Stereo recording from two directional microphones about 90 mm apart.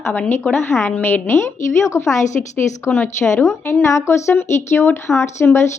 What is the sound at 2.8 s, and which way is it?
A woman's voice, 25° left (ahead or behind).